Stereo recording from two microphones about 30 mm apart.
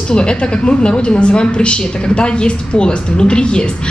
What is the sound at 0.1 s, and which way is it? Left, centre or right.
A woman's voice, left.